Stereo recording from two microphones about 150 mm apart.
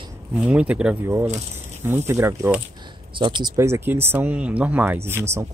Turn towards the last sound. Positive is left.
turn(degrees=-15)  # may be behind; listen again after turning